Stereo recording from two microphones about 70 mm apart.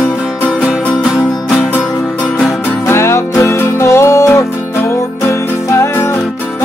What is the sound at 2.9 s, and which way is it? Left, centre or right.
Music, left.